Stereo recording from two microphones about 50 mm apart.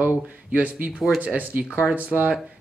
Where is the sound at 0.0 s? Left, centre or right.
Right.